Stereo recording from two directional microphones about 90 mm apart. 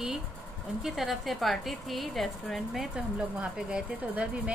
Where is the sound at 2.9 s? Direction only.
10° right (ahead or behind).